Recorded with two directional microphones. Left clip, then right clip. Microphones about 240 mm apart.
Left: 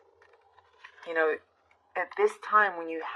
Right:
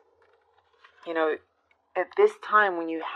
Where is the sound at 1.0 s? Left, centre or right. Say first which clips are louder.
Right 1 dB; right.